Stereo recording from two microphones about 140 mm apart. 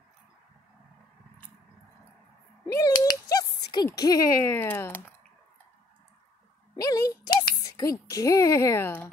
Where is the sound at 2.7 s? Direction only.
25° left (ahead or behind).